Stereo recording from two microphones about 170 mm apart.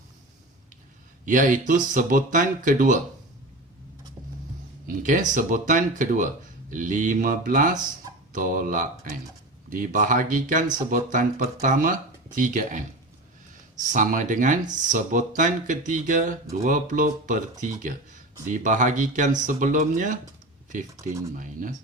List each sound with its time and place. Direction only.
1.2 s speech: 50° right (ahead or behind)
4.9 s speech: 50° right (ahead or behind)
20.9 s speech: 15° right (ahead or behind)
21.3 s speech: 50° right (ahead or behind)